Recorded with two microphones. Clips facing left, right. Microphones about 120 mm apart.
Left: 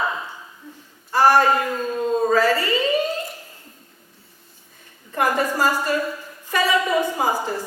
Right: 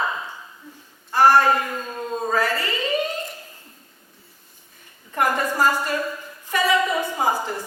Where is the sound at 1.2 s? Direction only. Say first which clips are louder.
Even; 15° left (ahead or behind).